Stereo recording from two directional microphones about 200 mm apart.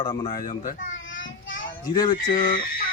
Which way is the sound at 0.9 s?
70° left (ahead or behind).